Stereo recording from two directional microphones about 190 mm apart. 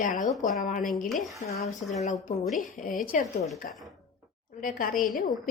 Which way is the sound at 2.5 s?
45° left (ahead or behind).